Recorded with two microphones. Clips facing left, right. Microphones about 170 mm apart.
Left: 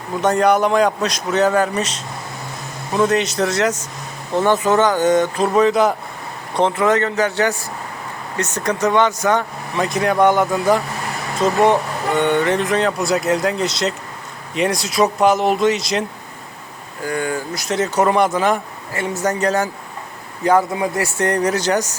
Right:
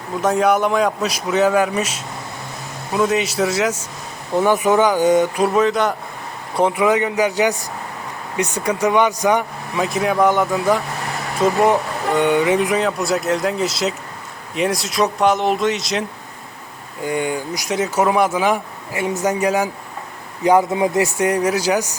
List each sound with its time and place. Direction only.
0.2 s speech: centre (ahead or behind)
6.6 s speech: 10° right (ahead or behind)
9.8 s speech: centre (ahead or behind)
17.0 s speech: 20° right (ahead or behind)
21.2 s speech: 5° right (ahead or behind)